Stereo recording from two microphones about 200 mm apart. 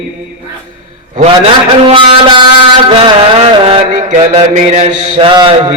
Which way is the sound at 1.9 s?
25° right (ahead or behind).